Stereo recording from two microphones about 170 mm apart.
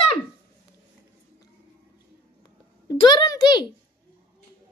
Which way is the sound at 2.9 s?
25° left (ahead or behind).